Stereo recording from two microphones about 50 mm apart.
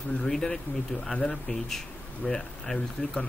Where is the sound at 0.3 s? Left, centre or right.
Centre.